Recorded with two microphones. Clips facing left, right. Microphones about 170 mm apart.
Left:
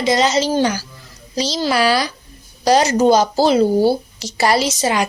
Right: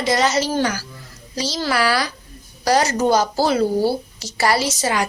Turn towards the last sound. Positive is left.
turn(degrees=20)  # may be behind; listen again after turning